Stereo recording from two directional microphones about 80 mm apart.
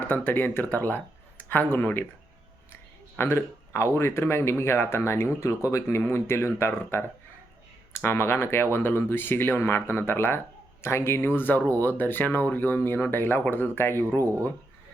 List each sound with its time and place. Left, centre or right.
0.1 s speech: left
3.2 s speech: left